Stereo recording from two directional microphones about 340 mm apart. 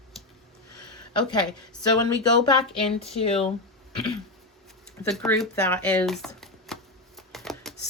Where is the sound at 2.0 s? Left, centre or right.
Centre.